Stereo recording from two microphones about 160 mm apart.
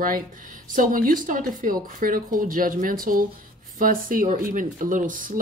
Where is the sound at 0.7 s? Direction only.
60° right (ahead or behind).